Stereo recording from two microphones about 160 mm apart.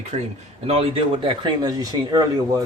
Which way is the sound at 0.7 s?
35° right (ahead or behind).